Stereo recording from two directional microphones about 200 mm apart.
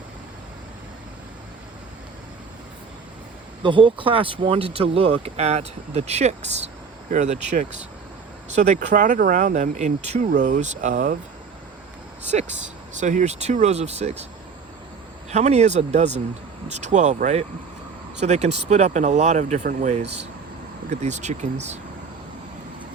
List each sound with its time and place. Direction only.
3.6 s speech: 25° right (ahead or behind); by 11.2 s 40° right (ahead or behind)
12.3 s speech: 35° right (ahead or behind)
15.3 s speech: 35° right (ahead or behind)